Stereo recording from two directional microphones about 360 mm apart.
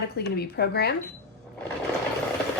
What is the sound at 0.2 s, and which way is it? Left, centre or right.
Speech, left.